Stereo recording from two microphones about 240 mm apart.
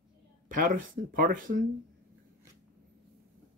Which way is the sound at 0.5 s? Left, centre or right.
Right.